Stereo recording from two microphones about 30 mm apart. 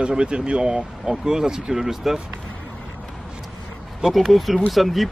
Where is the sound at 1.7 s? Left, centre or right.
Centre.